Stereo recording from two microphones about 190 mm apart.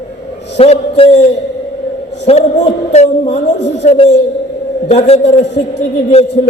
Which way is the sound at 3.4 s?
65° left (ahead or behind).